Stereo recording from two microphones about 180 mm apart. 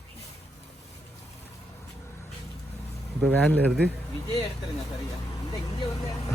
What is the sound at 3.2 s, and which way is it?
Speech, 5° left (ahead or behind).